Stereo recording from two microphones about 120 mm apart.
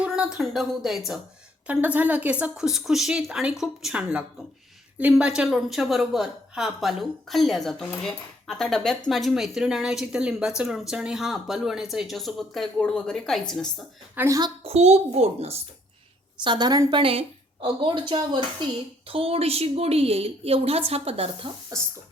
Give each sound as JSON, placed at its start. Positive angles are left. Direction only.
{"t": 0.0, "sound": "a woman's voice", "side_deg": -10}
{"t": 14.2, "sound": "a woman's voice", "side_deg": -30}
{"t": 14.6, "sound": "a woman's voice", "side_deg": -60}
{"t": 16.4, "sound": "a woman's voice", "side_deg": -40}
{"t": 19.0, "sound": "a woman's voice", "side_deg": -50}